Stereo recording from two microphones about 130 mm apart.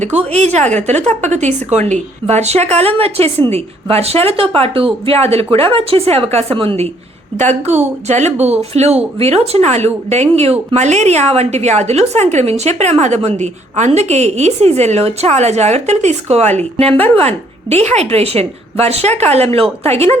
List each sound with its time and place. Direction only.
0.0 s a woman's voice: 60° right (ahead or behind)
7.3 s a woman's voice: 60° right (ahead or behind)